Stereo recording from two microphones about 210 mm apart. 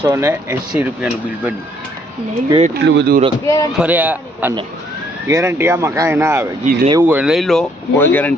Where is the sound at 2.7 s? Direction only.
55° right (ahead or behind).